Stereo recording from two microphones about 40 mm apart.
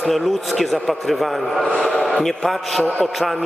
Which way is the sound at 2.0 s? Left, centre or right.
Centre.